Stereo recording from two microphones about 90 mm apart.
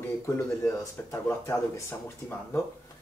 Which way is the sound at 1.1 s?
30° left (ahead or behind).